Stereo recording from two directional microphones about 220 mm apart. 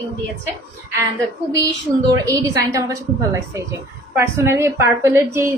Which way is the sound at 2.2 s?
15° right (ahead or behind).